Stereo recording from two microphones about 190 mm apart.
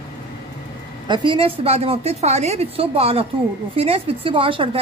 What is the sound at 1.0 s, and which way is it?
A woman's voice, 25° right (ahead or behind).